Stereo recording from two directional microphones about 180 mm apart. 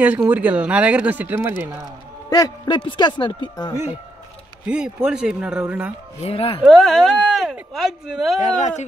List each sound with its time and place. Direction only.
0.0 s speech: 10° right (ahead or behind)
2.2 s speech: 20° left (ahead or behind)
4.6 s speech: 5° right (ahead or behind)
6.2 s speech: 30° left (ahead or behind)
6.6 s speech: centre (ahead or behind)
8.4 s speech: 40° left (ahead or behind)